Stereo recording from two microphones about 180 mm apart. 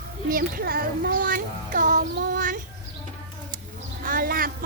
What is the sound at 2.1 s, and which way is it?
Child singing, 65° right (ahead or behind).